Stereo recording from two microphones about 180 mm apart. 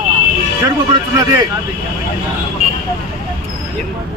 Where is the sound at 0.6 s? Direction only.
20° right (ahead or behind).